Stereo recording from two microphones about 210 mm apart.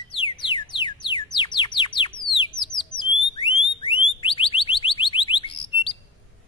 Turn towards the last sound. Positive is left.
turn(degrees=25)  # may be behind; listen again after turning